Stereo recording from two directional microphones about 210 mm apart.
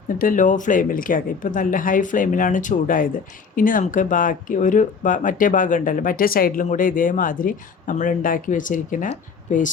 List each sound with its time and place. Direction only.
0.2 s speech: 40° left (ahead or behind)